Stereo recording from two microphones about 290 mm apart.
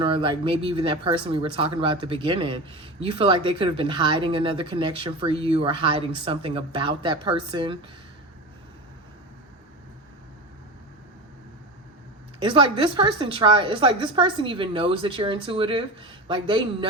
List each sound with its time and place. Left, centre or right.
0.0 s speech: centre
12.4 s speech: centre